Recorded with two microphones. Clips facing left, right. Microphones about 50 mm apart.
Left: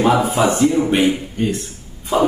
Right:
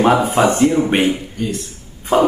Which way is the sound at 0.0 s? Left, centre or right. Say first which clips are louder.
Right 2 dB; right.